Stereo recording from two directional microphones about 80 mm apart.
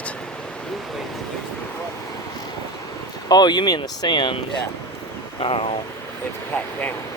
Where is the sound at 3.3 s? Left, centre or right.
Left.